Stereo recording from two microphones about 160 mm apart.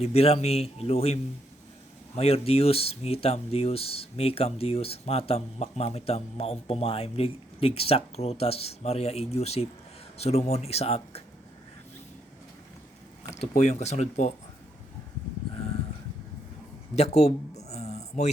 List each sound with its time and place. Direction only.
0.0 s speech: 40° left (ahead or behind)
13.3 s speech: 45° left (ahead or behind)
16.9 s speech: 45° left (ahead or behind)
17.6 s a sound: 45° left (ahead or behind)